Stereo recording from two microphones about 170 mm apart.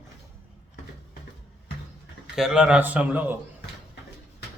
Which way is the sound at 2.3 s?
5° right (ahead or behind).